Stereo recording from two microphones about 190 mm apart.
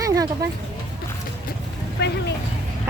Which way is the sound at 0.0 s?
20° right (ahead or behind).